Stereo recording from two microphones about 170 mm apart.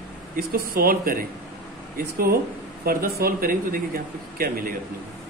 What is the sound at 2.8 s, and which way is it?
A man's voice, 60° right (ahead or behind).